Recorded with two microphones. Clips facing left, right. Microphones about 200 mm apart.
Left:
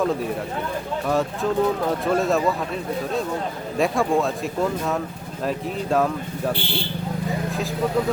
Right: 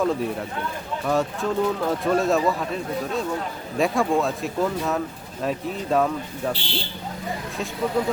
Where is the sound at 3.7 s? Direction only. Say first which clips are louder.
Left 1 dB; centre (ahead or behind).